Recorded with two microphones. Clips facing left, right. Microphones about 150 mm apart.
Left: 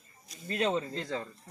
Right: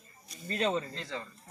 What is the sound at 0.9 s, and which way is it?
Speech, 40° left (ahead or behind).